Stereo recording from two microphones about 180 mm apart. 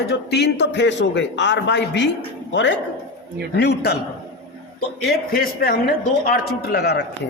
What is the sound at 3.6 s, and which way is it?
Speech, 65° left (ahead or behind).